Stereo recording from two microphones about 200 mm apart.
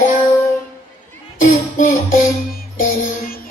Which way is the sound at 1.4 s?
40° left (ahead or behind).